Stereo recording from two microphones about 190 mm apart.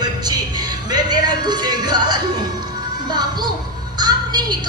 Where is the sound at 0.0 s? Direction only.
20° right (ahead or behind).